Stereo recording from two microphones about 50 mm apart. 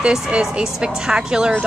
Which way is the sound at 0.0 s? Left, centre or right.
Centre.